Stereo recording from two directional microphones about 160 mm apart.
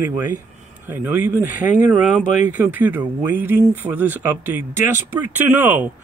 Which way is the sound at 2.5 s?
10° right (ahead or behind).